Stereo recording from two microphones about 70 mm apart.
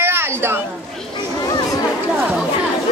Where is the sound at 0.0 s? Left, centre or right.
Right.